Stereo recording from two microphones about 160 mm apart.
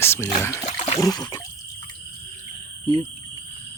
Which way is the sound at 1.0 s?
25° left (ahead or behind).